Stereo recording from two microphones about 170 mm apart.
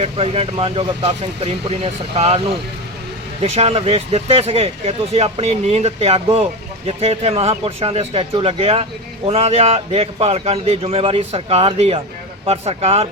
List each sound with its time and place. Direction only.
0.0 s speech: 35° right (ahead or behind)
3.5 s speech: 40° right (ahead or behind)